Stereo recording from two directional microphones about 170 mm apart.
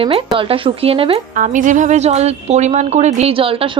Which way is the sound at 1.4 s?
50° right (ahead or behind).